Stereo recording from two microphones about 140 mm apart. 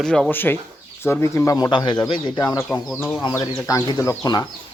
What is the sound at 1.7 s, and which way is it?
Speech, 35° left (ahead or behind).